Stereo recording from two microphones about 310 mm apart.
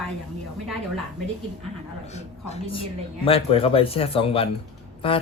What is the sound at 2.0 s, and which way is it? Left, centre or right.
A man's voice, left.